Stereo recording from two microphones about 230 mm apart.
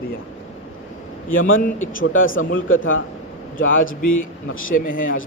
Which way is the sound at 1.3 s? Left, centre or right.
Left.